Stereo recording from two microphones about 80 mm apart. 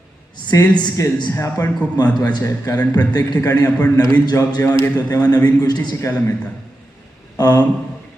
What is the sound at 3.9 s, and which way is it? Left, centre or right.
A man's voice, left.